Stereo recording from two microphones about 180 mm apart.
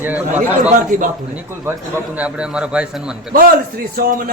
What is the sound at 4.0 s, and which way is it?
Speech, 50° right (ahead or behind).